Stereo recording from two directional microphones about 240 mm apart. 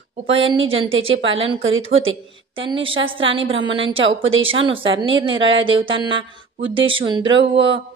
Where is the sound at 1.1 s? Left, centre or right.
Right.